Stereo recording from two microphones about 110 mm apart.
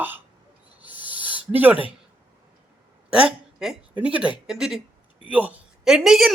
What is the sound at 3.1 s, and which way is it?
A woman's voice, 5° right (ahead or behind).